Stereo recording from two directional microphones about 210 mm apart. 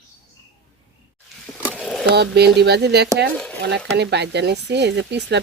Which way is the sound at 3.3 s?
5° left (ahead or behind).